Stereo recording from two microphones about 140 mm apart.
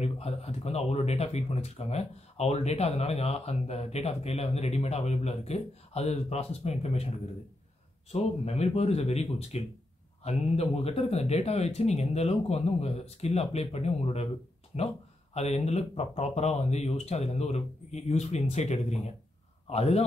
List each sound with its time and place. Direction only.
0.0 s speech: 50° left (ahead or behind)